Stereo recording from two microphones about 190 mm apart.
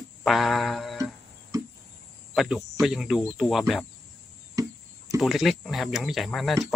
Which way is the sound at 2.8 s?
Centre (ahead or behind).